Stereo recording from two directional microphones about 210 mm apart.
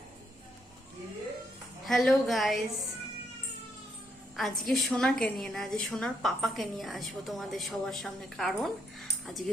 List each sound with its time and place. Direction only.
1.8 s a woman's voice: centre (ahead or behind)
4.4 s a woman's voice: centre (ahead or behind)